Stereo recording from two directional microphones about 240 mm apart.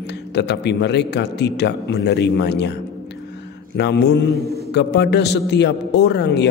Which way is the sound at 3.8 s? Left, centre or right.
Left.